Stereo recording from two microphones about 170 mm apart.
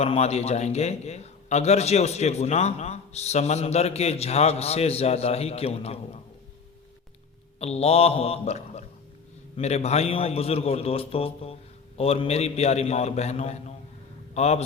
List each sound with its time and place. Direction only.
0.0 s a man's voice: 40° left (ahead or behind)
7.6 s a man's voice: 35° left (ahead or behind)